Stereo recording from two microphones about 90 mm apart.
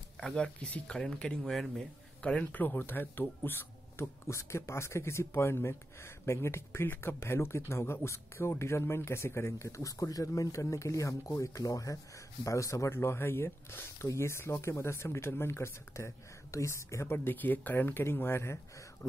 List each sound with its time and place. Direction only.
0.2 s speech: 10° left (ahead or behind); by 18.6 s 30° left (ahead or behind)